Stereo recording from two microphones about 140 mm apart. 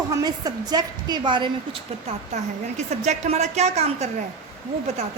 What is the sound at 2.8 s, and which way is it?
A woman's voice, 55° right (ahead or behind).